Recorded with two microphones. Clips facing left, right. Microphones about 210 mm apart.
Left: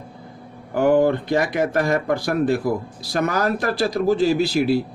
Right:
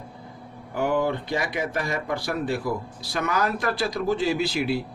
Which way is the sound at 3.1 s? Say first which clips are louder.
Left 5 dB; 40° left (ahead or behind).